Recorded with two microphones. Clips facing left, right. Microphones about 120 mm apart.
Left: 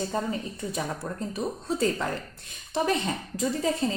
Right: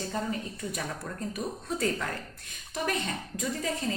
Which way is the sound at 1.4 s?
30° left (ahead or behind).